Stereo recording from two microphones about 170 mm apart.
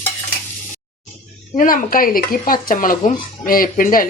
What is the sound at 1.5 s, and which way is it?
Speech, 55° left (ahead or behind).